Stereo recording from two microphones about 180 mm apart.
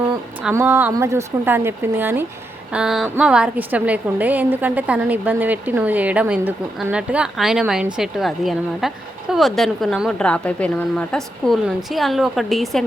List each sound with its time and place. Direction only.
0.5 s a woman's voice: 15° right (ahead or behind)